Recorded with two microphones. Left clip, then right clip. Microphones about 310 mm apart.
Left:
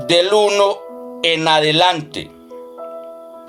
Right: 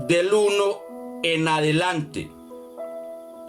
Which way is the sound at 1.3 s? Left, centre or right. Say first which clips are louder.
Left 8 dB; left.